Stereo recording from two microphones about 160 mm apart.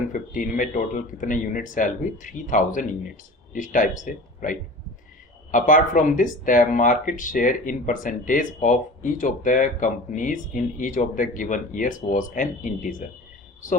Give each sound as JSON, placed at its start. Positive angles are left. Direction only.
{"t": 0.1, "sound": "speech", "side_deg": 55}